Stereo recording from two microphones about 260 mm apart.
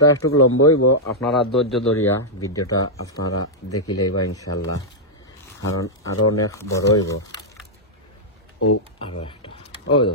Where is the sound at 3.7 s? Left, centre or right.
Left.